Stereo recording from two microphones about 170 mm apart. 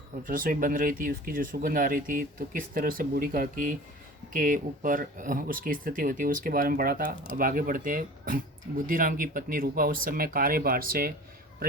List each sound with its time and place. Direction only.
0.3 s speech: 55° right (ahead or behind)